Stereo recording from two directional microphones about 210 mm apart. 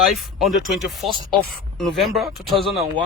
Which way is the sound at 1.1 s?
25° right (ahead or behind).